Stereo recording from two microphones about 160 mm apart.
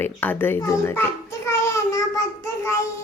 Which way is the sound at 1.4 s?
20° left (ahead or behind).